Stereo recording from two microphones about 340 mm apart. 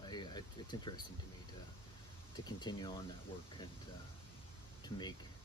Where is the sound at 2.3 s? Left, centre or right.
Centre.